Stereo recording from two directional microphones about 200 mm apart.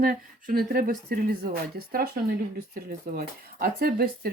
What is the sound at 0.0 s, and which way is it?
Speech, 45° right (ahead or behind).